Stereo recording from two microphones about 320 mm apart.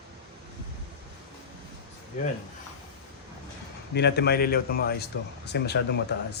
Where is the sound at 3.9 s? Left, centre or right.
Left.